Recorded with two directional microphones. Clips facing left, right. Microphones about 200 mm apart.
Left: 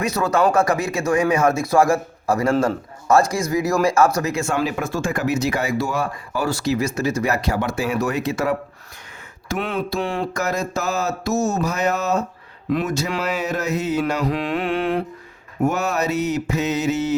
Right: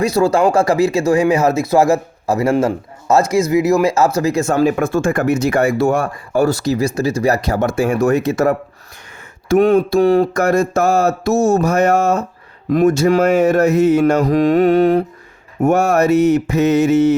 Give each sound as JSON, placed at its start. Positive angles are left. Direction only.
{"t": 0.0, "sound": "a man's voice", "side_deg": -30}
{"t": 4.8, "sound": "speech", "side_deg": -55}
{"t": 9.6, "sound": "speech", "side_deg": -45}
{"t": 15.6, "sound": "speech", "side_deg": -55}